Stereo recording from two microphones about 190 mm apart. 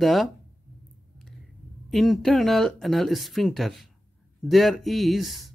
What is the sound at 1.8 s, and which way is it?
Speech, centre (ahead or behind).